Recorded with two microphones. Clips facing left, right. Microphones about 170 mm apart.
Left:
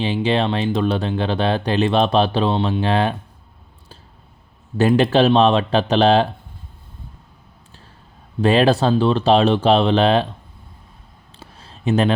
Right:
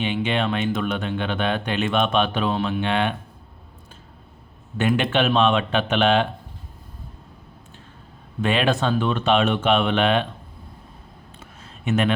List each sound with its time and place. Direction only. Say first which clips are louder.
0.0 s speech: left 4 dB; 35° left (ahead or behind)
4.8 s speech: left 6 dB; 35° left (ahead or behind)
8.4 s speech: left 6 dB; 35° left (ahead or behind)
11.3 s a sound: left 5 dB; 30° left (ahead or behind)